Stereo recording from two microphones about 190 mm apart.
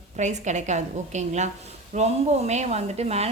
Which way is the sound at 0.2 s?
40° right (ahead or behind).